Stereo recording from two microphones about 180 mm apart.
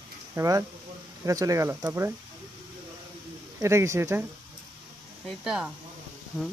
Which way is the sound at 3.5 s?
15° right (ahead or behind).